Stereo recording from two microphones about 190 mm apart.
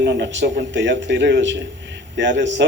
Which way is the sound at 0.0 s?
65° right (ahead or behind).